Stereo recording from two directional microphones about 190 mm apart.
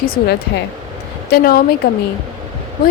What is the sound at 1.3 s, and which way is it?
Speech, 55° left (ahead or behind).